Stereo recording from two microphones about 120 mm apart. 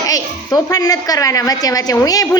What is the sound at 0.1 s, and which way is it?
A child's voice, 30° left (ahead or behind).